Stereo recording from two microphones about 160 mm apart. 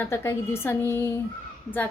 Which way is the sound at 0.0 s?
15° left (ahead or behind).